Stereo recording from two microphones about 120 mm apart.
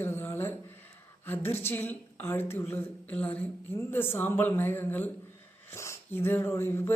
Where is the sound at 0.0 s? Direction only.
20° left (ahead or behind).